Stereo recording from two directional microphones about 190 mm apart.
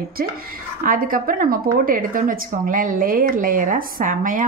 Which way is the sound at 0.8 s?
45° right (ahead or behind).